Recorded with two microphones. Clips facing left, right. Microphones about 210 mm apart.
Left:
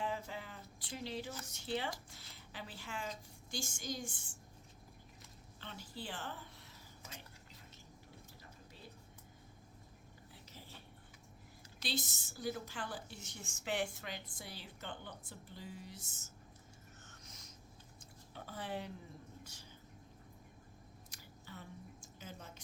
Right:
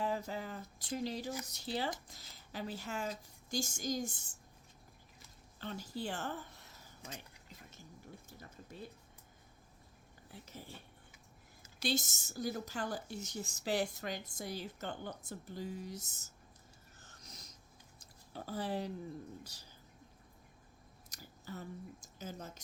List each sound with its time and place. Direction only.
0.0 s a sound: 40° right (ahead or behind)
1.5 s speech: 35° right (ahead or behind)
5.5 s a woman's voice: 40° right (ahead or behind)
11.8 s a woman's voice: 45° right (ahead or behind)
17.0 s a sound: 35° right (ahead or behind)
18.3 s speech: 35° right (ahead or behind)
21.1 s speech: 40° right (ahead or behind)